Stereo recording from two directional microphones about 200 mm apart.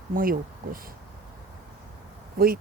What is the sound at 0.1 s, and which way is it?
Speech, 45° right (ahead or behind).